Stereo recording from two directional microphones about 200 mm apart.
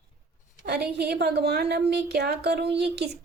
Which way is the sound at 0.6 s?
55° right (ahead or behind).